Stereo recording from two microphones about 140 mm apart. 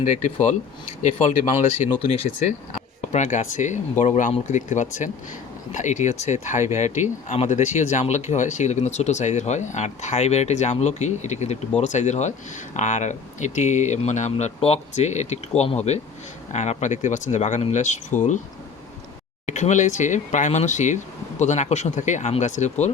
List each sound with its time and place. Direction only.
0.0 s speech: 55° left (ahead or behind)
3.0 s speech: 55° left (ahead or behind)
19.5 s speech: 60° left (ahead or behind)